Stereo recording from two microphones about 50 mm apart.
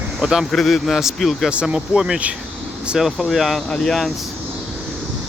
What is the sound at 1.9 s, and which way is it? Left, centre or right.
Speech, centre.